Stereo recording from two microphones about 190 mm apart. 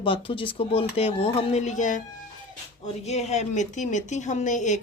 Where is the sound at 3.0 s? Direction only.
35° left (ahead or behind).